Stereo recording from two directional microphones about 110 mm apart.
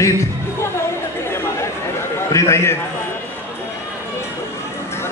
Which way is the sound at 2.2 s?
25° left (ahead or behind).